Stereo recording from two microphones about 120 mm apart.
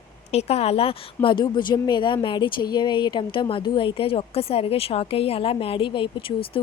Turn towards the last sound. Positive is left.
turn(degrees=50)  # may be behind; listen again after turning